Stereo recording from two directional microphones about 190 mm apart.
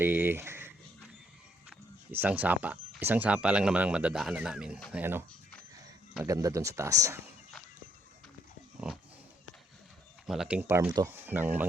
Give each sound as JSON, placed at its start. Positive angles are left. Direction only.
{"t": 0.0, "sound": "a sound", "side_deg": -10}
{"t": 2.1, "sound": "speech", "side_deg": -10}
{"t": 10.2, "sound": "speech", "side_deg": -5}